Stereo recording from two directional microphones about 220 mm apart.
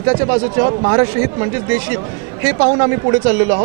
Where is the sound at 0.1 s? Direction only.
20° right (ahead or behind).